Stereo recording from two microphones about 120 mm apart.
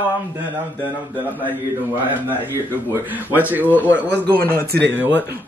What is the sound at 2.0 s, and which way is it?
A man's voice, 15° right (ahead or behind).